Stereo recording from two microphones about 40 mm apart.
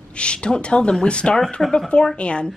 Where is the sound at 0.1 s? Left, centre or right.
Left.